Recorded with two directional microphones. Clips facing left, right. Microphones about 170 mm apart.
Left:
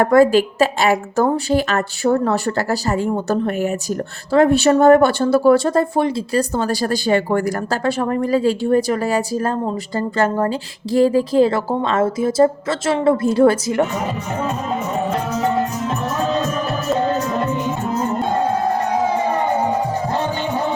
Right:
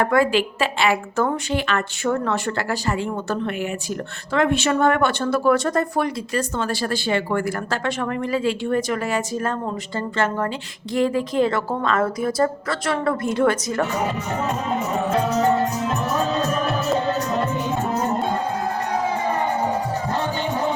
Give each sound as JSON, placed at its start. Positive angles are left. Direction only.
{"t": 0.0, "sound": "a woman's voice", "side_deg": 40}